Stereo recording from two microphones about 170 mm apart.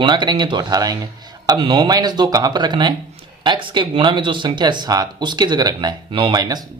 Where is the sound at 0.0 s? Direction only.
25° right (ahead or behind).